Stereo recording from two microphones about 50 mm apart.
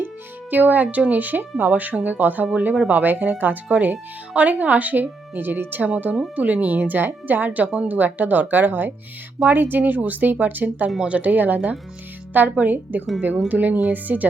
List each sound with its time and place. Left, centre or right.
0.5 s a woman's voice: right